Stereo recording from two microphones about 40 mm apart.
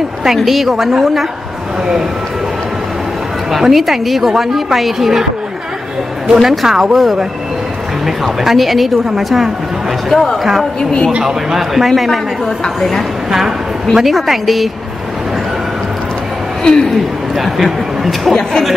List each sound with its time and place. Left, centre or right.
0.5 s speech: centre
3.5 s speech: centre
6.2 s speech: centre
8.5 s speech: centre
10.1 s a man's voice: centre
11.1 s speech: centre
13.9 s speech: centre
16.6 s speech: centre
17.4 s speech: centre